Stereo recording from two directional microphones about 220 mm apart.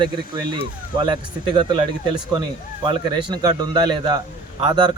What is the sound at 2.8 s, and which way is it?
Speech, 20° right (ahead or behind).